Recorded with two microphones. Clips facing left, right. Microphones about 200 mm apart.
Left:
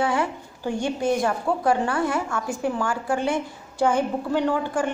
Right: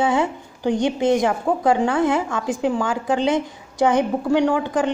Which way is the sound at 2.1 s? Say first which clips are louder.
Right 5 dB; 90° right.